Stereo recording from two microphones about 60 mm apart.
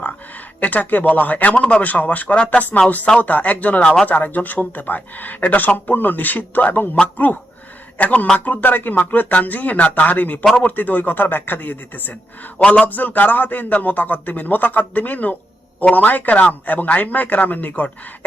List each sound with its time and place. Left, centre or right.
0.6 s speech: left
12.5 s a man's voice: centre
12.8 s speech: left